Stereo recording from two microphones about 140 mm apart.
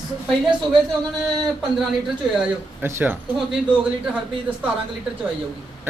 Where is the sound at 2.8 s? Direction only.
15° right (ahead or behind).